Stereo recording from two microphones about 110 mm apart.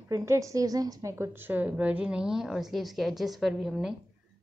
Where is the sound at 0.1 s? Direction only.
30° right (ahead or behind).